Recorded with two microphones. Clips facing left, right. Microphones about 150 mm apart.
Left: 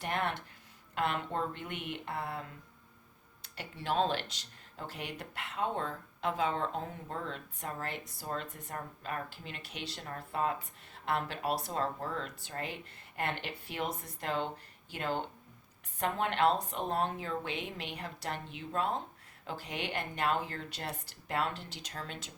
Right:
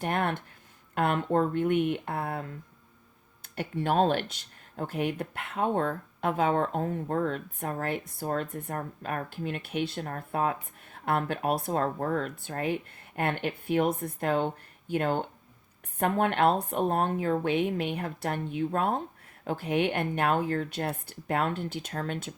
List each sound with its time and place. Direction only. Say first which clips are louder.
0.0 s speech: right 6 dB; 50° right (ahead or behind)
3.4 s speech: right 9 dB; 50° right (ahead or behind)